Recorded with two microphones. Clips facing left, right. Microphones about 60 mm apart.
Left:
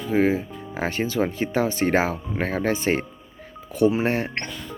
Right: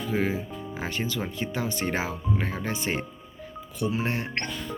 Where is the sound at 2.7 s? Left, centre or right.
Left.